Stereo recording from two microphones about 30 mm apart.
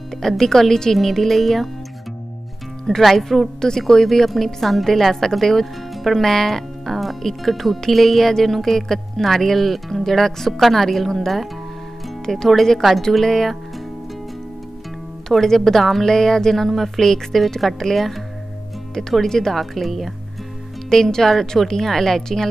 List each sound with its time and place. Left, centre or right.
0.2 s speech: centre
3.0 s speech: centre
3.6 s speech: centre
15.4 s speech: centre
16.6 s speech: centre
19.2 s speech: centre
19.6 s speech: centre
20.9 s speech: centre